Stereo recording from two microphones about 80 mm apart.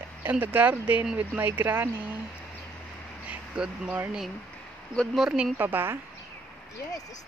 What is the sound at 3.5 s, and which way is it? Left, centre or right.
Speech, centre.